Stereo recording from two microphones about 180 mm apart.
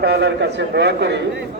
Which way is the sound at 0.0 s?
65° right (ahead or behind).